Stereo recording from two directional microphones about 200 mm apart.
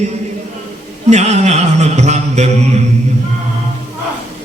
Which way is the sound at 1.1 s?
35° right (ahead or behind).